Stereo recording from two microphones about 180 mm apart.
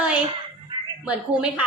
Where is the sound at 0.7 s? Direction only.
25° right (ahead or behind).